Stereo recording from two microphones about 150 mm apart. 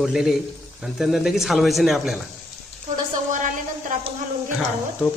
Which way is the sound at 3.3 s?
60° right (ahead or behind).